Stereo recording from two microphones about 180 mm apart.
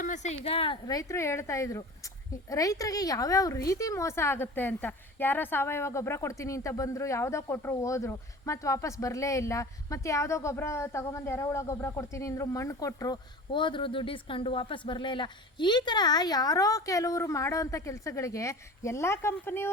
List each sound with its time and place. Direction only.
0.0 s a woman's voice: 40° left (ahead or behind); by 19.7 s 15° left (ahead or behind)